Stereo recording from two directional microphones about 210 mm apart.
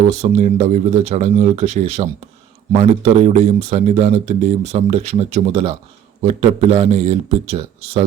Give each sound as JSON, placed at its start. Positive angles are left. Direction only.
{"t": 0.1, "sound": "speech", "side_deg": -30}